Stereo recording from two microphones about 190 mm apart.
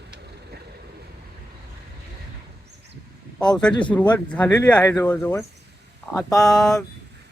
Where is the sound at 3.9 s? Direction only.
5° left (ahead or behind).